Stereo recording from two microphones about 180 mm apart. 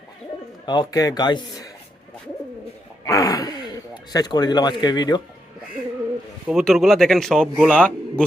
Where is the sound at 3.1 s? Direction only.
20° left (ahead or behind).